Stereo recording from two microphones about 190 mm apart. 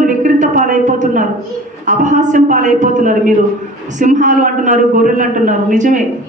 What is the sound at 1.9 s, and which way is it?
A woman's voice, 40° right (ahead or behind).